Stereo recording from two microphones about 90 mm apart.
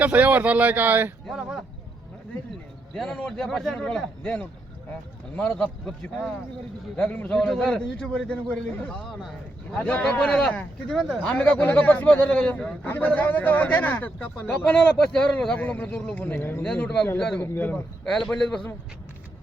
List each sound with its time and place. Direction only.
0.0 s speech: 15° right (ahead or behind)
1.4 s speech: 5° right (ahead or behind)
2.9 s a man's voice: 5° left (ahead or behind)
14.7 s a man's voice: 10° left (ahead or behind)
16.6 s a man's voice: 10° left (ahead or behind)
18.0 s a man's voice: 5° left (ahead or behind)